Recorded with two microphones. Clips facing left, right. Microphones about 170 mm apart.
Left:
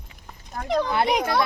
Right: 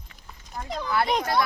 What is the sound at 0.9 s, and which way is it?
Speech, 20° left (ahead or behind).